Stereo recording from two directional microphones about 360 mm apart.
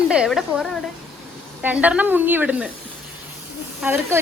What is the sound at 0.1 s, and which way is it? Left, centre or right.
Speech, centre.